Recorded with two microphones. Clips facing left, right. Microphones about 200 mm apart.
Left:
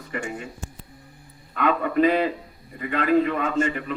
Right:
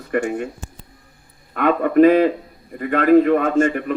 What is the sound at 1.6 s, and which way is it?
A man's voice, 50° right (ahead or behind).